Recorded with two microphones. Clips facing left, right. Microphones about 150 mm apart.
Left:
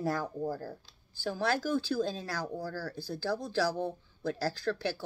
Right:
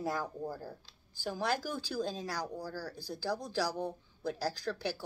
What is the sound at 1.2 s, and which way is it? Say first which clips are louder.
Speech: left 3 dB; 10° right (ahead or behind).